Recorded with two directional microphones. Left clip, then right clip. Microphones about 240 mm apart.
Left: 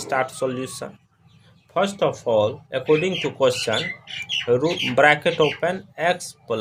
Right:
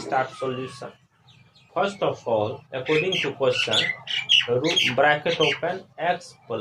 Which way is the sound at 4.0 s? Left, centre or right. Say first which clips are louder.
Right 7 dB; centre.